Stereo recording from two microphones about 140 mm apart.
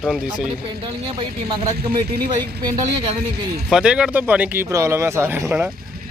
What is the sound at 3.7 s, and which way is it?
Speech, 5° right (ahead or behind).